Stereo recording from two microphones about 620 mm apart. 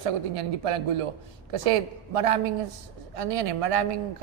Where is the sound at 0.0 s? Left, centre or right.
Right.